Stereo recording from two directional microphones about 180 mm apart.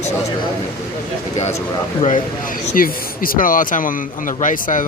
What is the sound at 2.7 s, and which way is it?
Speech, 50° left (ahead or behind).